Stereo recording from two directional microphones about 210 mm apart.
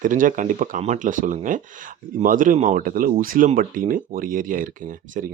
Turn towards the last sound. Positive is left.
turn(degrees=-40)  # may be behind; listen again after turning